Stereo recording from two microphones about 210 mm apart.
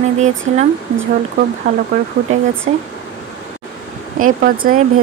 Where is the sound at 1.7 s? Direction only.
35° right (ahead or behind).